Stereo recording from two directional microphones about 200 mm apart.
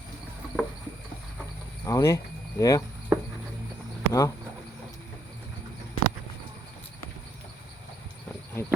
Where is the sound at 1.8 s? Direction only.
15° left (ahead or behind).